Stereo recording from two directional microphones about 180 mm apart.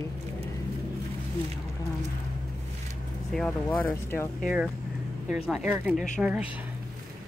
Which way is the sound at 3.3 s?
5° left (ahead or behind).